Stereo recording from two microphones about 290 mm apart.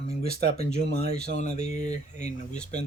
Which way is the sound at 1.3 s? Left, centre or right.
Left.